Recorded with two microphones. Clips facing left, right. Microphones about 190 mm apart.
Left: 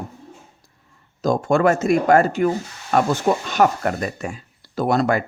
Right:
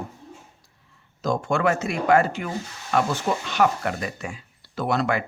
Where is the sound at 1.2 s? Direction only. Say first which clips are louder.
Left 6 dB; 40° left (ahead or behind).